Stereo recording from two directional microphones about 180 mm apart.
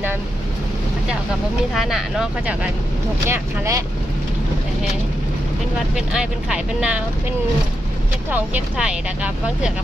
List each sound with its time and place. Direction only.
1.8 s speech: centre (ahead or behind)
3.3 s speech: 15° right (ahead or behind)
5.9 s speech: 5° right (ahead or behind)
8.3 s speech: 5° right (ahead or behind)